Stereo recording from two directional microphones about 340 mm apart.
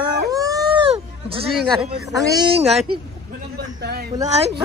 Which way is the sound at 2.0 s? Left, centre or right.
Centre.